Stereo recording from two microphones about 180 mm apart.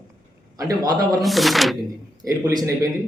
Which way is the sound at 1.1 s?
Centre (ahead or behind).